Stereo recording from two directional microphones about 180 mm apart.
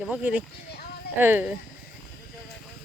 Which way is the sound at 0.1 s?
10° right (ahead or behind).